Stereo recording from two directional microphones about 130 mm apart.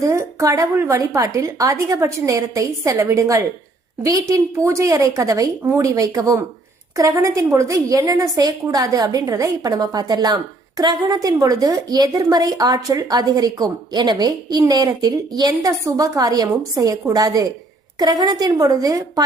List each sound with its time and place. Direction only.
0.0 s a woman's voice: 20° right (ahead or behind)